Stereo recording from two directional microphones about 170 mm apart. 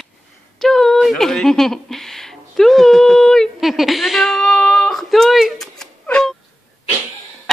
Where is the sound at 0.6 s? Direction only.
Centre (ahead or behind).